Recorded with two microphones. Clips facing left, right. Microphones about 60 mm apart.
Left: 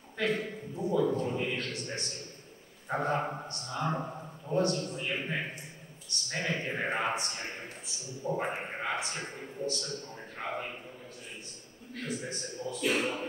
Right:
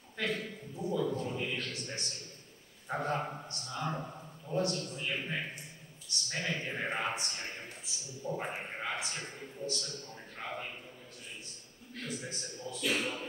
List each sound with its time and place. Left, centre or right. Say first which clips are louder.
0.2 s a man's voice: left 4 dB; centre
3.9 s a man's voice: left 5 dB; centre
4.6 s a man's voice: left 4 dB; centre
10.4 s a man's voice: left 4 dB; left
11.9 s a man's voice: left 4 dB; centre